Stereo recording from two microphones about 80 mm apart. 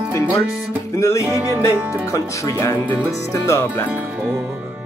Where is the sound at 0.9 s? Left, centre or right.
Left.